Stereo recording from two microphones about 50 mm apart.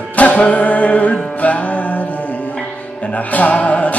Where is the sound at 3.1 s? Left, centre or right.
Left.